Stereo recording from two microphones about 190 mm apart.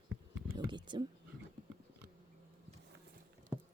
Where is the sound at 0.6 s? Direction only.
25° right (ahead or behind).